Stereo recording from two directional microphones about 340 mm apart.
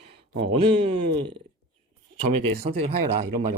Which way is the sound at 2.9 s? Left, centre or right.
Right.